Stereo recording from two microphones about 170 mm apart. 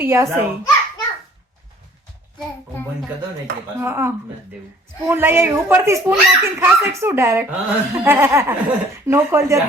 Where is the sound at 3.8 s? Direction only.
15° right (ahead or behind).